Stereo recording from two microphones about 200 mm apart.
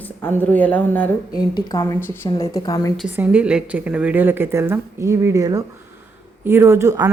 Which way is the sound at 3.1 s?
5° right (ahead or behind).